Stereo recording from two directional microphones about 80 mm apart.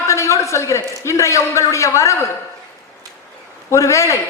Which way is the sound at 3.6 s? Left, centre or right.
Left.